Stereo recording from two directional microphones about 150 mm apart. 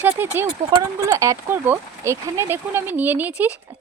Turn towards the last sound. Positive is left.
turn(degrees=-10)  # may be behind; listen again after turning